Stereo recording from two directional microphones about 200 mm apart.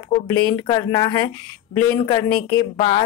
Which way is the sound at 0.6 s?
20° left (ahead or behind).